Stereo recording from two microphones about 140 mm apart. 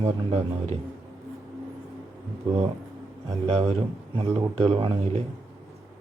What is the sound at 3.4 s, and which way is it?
A man's voice, 45° right (ahead or behind).